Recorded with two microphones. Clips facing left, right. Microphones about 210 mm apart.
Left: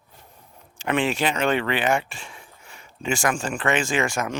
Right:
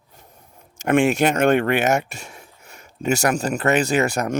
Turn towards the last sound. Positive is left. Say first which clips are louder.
# right 4 dB
turn(degrees=-40)  # may be behind; listen again after turning